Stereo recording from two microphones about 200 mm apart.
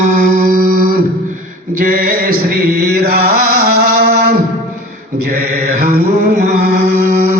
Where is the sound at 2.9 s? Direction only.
45° right (ahead or behind).